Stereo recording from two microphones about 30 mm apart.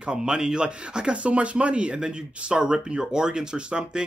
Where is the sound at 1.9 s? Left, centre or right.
Right.